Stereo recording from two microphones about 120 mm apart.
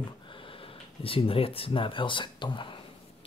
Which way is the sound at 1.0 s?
50° left (ahead or behind).